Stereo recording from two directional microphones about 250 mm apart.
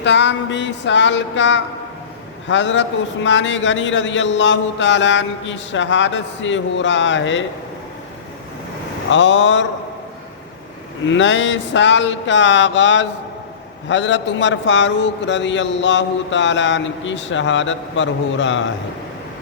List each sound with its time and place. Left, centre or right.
0.0 s a man's voice: left
9.0 s a man's voice: left
11.1 s a man's voice: left